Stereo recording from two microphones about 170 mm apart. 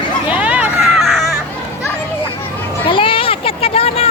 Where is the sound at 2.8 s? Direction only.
30° left (ahead or behind).